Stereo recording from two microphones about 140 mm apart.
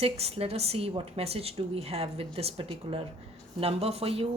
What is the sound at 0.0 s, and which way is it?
A woman's voice, 45° right (ahead or behind).